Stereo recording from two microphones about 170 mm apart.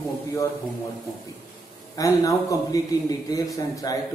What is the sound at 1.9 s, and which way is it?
A man's voice, 20° left (ahead or behind).